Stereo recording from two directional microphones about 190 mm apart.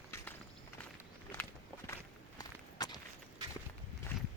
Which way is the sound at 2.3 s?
20° left (ahead or behind).